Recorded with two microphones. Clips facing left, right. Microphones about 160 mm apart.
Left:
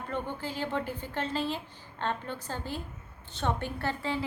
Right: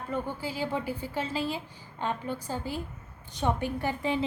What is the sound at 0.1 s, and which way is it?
A woman's voice, 10° right (ahead or behind).